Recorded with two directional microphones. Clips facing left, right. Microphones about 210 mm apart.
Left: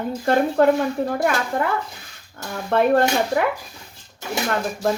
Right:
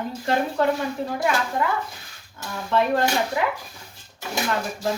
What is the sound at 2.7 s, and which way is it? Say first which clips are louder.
Speech: left 4 dB; 55° left (ahead or behind).